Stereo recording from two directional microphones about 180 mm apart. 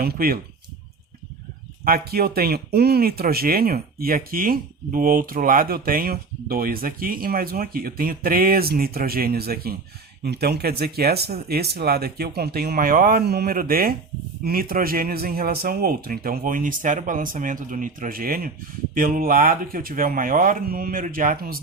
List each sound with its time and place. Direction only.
0.0 s speech: 55° right (ahead or behind)
1.8 s speech: 55° right (ahead or behind)